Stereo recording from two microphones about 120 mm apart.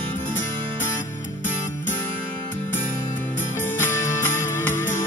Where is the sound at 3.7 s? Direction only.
20° left (ahead or behind).